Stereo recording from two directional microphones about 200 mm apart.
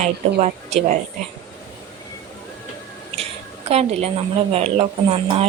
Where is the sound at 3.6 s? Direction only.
30° right (ahead or behind).